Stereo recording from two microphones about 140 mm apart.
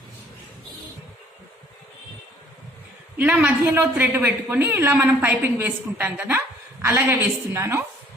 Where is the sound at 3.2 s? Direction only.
10° right (ahead or behind).